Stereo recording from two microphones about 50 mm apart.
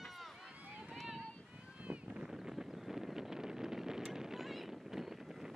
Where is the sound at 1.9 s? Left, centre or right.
Right.